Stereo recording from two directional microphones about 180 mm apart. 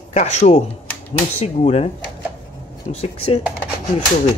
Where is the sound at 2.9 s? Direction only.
35° left (ahead or behind).